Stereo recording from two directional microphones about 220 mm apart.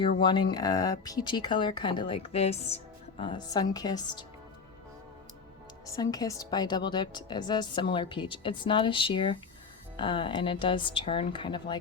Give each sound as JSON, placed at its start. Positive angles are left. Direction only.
{"t": 0.0, "sound": "speech", "side_deg": 20}
{"t": 5.8, "sound": "speech", "side_deg": 15}